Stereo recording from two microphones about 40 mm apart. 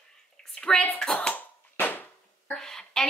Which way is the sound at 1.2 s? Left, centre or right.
Left.